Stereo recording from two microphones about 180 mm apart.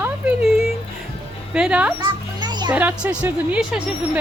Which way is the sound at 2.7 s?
5° right (ahead or behind).